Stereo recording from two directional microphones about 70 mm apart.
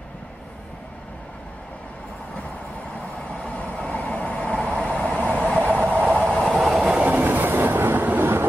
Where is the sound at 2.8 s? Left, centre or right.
Centre.